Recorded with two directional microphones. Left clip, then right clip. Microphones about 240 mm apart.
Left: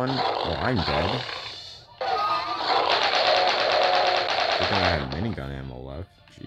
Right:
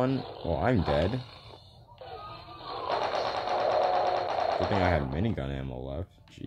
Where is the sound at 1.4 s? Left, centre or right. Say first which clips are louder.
Left 14 dB; left.